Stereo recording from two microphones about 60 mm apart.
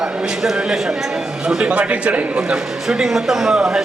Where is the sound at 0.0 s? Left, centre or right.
Centre.